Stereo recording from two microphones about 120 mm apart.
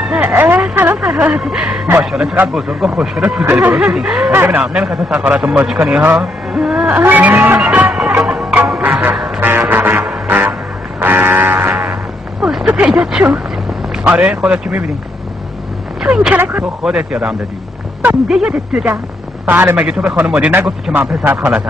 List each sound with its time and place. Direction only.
0.0 s a sound: 5° right (ahead or behind)
0.3 s a man's voice: 15° right (ahead or behind)
3.4 s speech: 20° right (ahead or behind)
3.7 s speech: 5° right (ahead or behind)
4.3 s a man's voice: 15° right (ahead or behind)
7.0 s music: 15° right (ahead or behind)
12.4 s a sound: 5° right (ahead or behind)
14.0 s a man's voice: 10° right (ahead or behind)
16.0 s a man's voice: 5° right (ahead or behind)